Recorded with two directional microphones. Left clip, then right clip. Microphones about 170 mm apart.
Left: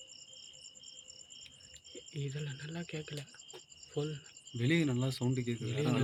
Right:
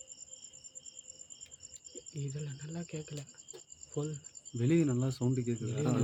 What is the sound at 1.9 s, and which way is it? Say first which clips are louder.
Speech: left 2 dB; 10° right (ahead or behind).